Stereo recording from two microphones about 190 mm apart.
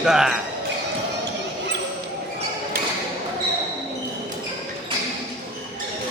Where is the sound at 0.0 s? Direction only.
5° right (ahead or behind).